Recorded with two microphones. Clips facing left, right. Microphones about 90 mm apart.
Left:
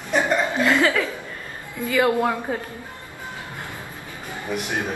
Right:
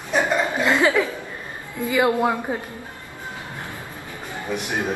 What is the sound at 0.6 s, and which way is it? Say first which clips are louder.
A woman's voice: right 2 dB; 20° right (ahead or behind).